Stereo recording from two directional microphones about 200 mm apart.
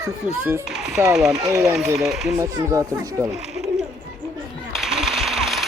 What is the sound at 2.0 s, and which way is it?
Speech, centre (ahead or behind).